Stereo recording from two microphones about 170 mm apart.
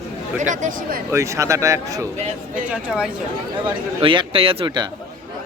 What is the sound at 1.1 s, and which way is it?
Speech, 15° right (ahead or behind).